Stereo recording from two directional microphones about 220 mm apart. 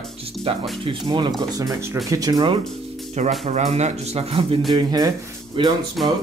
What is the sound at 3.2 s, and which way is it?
Speech, 30° right (ahead or behind).